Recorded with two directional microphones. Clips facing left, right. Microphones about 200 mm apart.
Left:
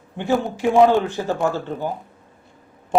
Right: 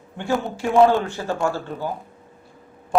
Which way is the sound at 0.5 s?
15° left (ahead or behind).